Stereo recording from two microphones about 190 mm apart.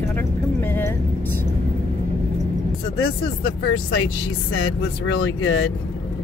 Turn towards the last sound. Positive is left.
turn(degrees=90)